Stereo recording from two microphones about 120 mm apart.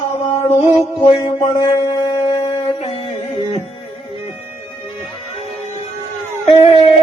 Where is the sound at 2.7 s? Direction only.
55° left (ahead or behind).